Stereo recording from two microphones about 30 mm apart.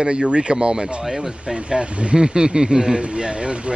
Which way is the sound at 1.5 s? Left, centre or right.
Right.